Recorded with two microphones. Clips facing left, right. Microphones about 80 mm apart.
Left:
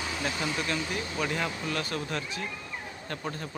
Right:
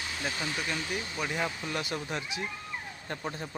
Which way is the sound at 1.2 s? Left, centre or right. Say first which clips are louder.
Left 2 dB; centre.